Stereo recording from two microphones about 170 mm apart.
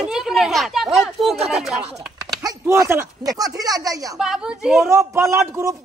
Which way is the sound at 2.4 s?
20° right (ahead or behind).